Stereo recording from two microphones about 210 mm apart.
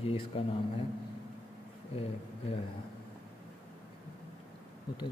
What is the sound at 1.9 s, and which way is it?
Speech, 30° left (ahead or behind).